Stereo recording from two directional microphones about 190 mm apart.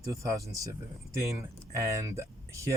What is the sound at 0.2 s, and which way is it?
Speech, 15° right (ahead or behind).